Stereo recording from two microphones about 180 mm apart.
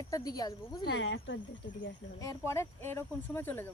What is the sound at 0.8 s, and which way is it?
Speech, 75° left (ahead or behind).